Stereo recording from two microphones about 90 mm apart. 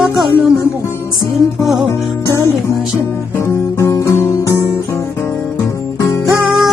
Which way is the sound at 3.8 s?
30° left (ahead or behind).